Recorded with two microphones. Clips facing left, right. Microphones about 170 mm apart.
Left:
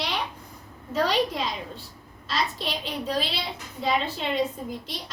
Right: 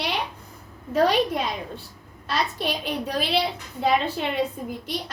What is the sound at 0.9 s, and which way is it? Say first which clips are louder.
A woman's voice: right 4 dB; 55° right (ahead or behind).